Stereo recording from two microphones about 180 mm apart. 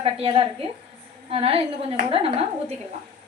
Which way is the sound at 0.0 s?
30° right (ahead or behind).